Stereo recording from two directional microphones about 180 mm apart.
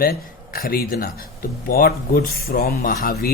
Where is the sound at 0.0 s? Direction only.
55° left (ahead or behind).